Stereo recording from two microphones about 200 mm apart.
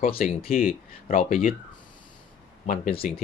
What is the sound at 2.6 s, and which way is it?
Speech, 45° left (ahead or behind).